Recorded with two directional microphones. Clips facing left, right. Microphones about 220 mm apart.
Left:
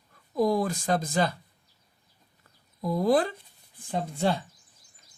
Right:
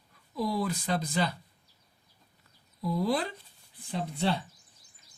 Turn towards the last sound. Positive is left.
turn(degrees=45)  # may be behind; listen again after turning